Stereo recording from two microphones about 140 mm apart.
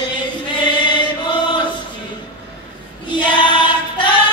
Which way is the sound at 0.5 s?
35° left (ahead or behind).